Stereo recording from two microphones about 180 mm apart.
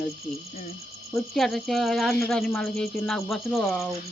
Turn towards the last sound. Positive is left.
turn(degrees=0)  # may be behind; listen again after turning